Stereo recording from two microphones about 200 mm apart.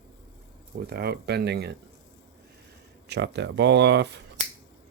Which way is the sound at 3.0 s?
60° right (ahead or behind).